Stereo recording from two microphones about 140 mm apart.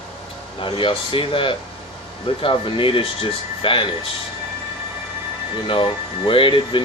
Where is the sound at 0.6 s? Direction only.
40° left (ahead or behind).